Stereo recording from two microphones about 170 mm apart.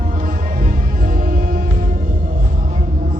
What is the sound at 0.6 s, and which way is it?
Music, 55° right (ahead or behind).